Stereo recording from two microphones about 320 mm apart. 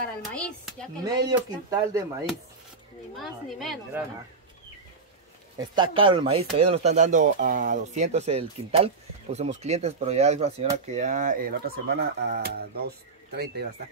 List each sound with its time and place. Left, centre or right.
0.3 s speech: centre
1.3 s speech: centre
3.2 s speech: centre
5.6 s speech: centre; by 13.7 s right